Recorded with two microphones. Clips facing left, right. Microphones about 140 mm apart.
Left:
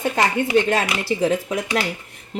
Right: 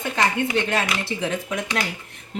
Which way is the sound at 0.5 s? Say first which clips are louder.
Left 5 dB; 45° left (ahead or behind).